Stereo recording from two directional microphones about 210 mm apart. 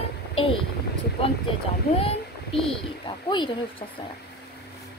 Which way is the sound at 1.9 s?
25° left (ahead or behind).